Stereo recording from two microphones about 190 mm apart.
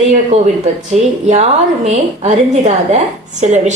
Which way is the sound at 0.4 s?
35° right (ahead or behind).